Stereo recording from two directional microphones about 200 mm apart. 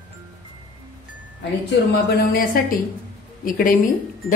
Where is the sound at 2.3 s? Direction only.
45° left (ahead or behind).